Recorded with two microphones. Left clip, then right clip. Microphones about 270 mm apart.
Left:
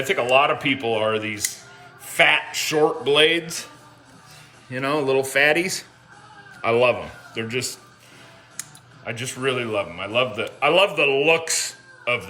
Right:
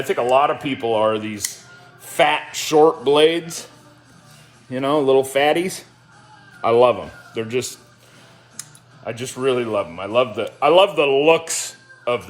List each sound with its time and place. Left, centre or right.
0.1 s a man's voice: centre
4.7 s a man's voice: centre
9.0 s a man's voice: centre